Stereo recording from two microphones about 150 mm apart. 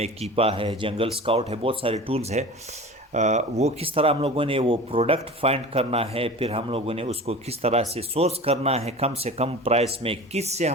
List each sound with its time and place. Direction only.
0.0 s speech: 40° right (ahead or behind)